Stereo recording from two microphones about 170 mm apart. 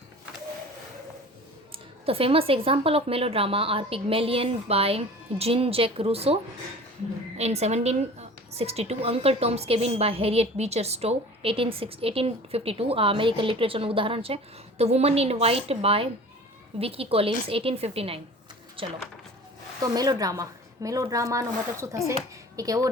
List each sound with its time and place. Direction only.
1.7 s a woman's voice: 35° right (ahead or behind)
19.8 s a woman's voice: 20° right (ahead or behind)